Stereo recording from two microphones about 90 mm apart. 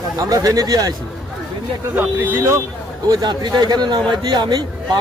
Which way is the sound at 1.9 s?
20° right (ahead or behind).